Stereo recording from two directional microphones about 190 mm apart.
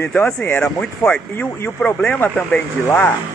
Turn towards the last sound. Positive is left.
turn(degrees=10)  # may be behind; listen again after turning